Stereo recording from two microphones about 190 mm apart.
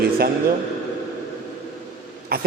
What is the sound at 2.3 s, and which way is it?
Speech, 55° right (ahead or behind).